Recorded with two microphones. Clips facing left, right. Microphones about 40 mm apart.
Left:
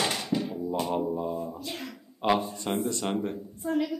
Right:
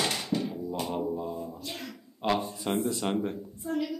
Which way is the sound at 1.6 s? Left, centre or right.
Centre.